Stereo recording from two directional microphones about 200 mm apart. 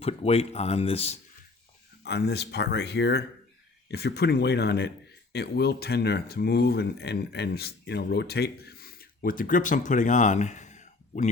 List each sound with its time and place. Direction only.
0.0 s speech: 30° left (ahead or behind)
2.0 s speech: 55° left (ahead or behind); by 11.3 s 35° left (ahead or behind)